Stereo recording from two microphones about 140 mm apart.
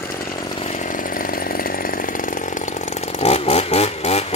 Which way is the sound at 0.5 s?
55° left (ahead or behind).